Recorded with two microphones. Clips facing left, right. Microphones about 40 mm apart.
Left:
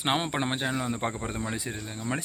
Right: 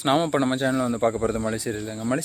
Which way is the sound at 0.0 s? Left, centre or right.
Left.